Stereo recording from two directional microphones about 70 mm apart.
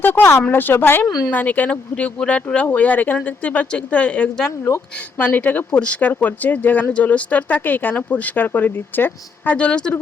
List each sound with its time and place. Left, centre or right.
0.0 s a woman's voice: left
9.6 s speech: centre